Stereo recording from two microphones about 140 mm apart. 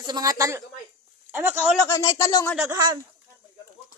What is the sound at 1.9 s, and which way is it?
Speech, 20° left (ahead or behind).